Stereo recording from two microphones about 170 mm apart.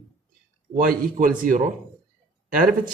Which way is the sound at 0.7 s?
55° right (ahead or behind).